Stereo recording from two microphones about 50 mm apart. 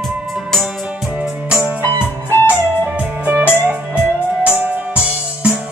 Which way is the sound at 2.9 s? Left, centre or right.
Right.